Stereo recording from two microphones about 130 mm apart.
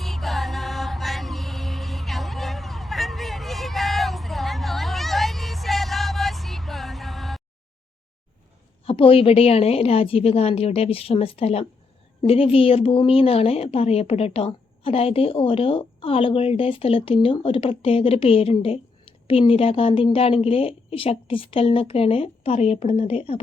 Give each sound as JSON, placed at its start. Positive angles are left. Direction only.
{"t": 0.0, "sound": "music", "side_deg": 0}
{"t": 8.8, "sound": "a woman's voice", "side_deg": 45}